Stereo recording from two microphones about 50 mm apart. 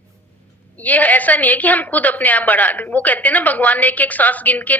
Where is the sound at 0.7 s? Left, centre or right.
Left.